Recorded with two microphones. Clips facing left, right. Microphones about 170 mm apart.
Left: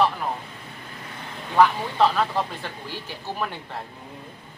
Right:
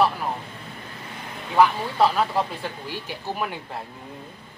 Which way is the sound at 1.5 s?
10° right (ahead or behind).